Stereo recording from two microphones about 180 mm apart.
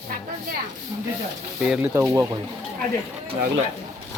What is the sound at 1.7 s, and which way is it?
Speech, 10° right (ahead or behind).